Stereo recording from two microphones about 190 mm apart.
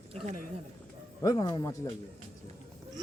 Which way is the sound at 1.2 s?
20° left (ahead or behind).